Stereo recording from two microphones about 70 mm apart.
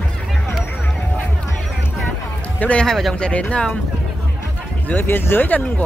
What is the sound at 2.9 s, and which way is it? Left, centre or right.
Speech, centre.